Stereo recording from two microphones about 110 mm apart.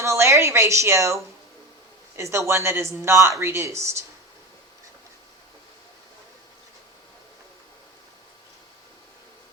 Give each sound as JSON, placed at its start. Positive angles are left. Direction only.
{"t": 0.0, "sound": "speech", "side_deg": -25}